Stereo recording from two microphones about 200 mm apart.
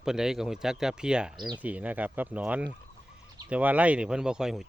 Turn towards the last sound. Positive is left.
turn(degrees=0)  # may be behind; listen again after turning